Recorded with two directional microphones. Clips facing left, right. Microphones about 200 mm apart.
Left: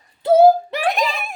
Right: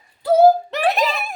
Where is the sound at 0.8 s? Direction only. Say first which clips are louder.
Right 2 dB; centre (ahead or behind).